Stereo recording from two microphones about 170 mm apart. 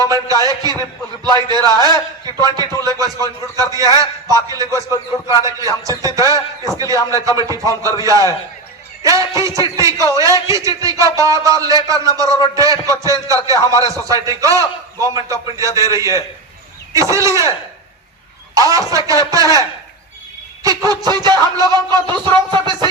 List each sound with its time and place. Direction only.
0.0 s a man's voice: 20° right (ahead or behind)
16.9 s chicken: 20° right (ahead or behind)
18.5 s a man's voice: 20° right (ahead or behind)
21.0 s a man's voice: 25° right (ahead or behind)